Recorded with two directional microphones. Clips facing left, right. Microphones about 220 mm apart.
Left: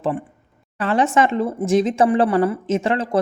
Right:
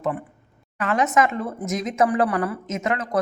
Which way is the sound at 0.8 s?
30° left (ahead or behind).